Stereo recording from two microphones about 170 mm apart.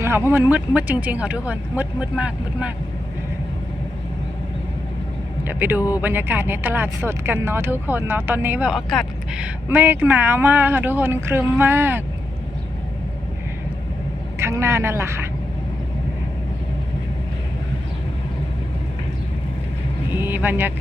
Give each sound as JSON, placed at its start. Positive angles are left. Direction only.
{"t": 0.0, "sound": "speech", "side_deg": -15}
{"t": 5.5, "sound": "speech", "side_deg": -10}
{"t": 14.3, "sound": "speech", "side_deg": -15}
{"t": 20.2, "sound": "speech", "side_deg": -10}